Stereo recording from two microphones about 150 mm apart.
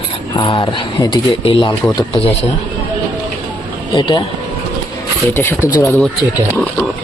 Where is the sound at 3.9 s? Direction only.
30° left (ahead or behind).